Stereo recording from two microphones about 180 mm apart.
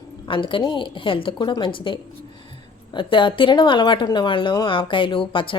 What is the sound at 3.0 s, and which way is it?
A woman's voice, 25° left (ahead or behind).